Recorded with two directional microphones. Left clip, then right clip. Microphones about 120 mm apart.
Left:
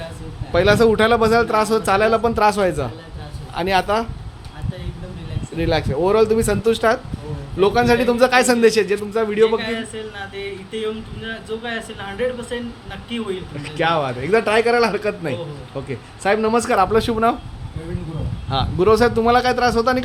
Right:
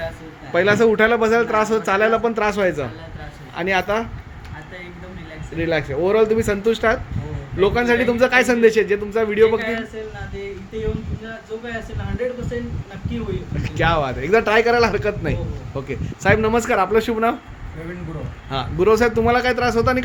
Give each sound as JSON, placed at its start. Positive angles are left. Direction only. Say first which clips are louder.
{"t": 0.5, "sound": "a man's voice", "louder": "left 1 dB", "side_deg": 10}
{"t": 5.5, "sound": "a man's voice", "louder": "left 1 dB", "side_deg": 5}
{"t": 9.6, "sound": "a man's voice", "louder": "right 1 dB", "side_deg": 30}
{"t": 11.6, "sound": "a woman's voice", "louder": "left 3 dB", "side_deg": 25}
{"t": 13.6, "sound": "a man's voice", "louder": "even", "side_deg": 5}
{"t": 18.5, "sound": "a man's voice", "louder": "left 1 dB", "side_deg": 5}